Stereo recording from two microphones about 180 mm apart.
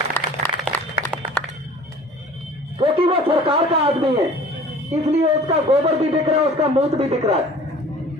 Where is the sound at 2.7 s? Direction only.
30° right (ahead or behind).